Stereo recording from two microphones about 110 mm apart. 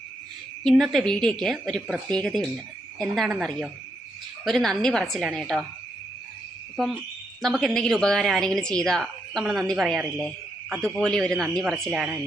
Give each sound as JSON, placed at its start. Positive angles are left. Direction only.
{"t": 0.6, "sound": "a woman's voice", "side_deg": 5}
{"t": 7.4, "sound": "a woman's voice", "side_deg": 0}